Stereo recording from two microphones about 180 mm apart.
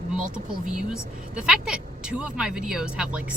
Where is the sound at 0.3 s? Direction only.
5° right (ahead or behind).